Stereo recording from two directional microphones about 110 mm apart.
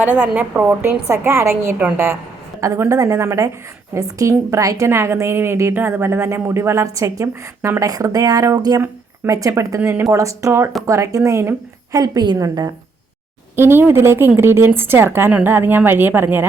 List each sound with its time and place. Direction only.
0.0 s a woman's voice: 10° right (ahead or behind); by 12.7 s 35° right (ahead or behind)
13.6 s speech: 20° right (ahead or behind)